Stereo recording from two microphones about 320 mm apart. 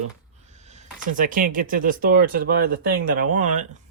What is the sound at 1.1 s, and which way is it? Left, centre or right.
Speech, right.